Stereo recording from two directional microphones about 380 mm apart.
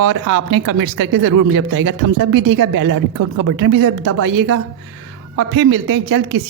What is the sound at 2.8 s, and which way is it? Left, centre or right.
Speech, right.